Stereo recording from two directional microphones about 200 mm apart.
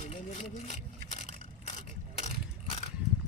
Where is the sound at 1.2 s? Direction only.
35° left (ahead or behind).